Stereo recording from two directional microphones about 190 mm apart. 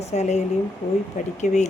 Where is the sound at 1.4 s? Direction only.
40° left (ahead or behind).